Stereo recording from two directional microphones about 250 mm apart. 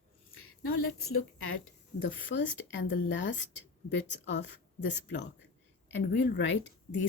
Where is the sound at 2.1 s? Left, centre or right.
Left.